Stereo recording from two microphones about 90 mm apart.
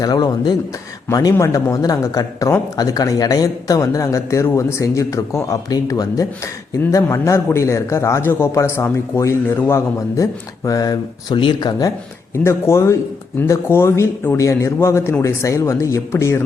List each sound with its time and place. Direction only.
0.0 s speech: 50° left (ahead or behind); by 9.8 s 25° left (ahead or behind)
10.2 s speech: 40° left (ahead or behind)
12.4 s speech: 30° left (ahead or behind)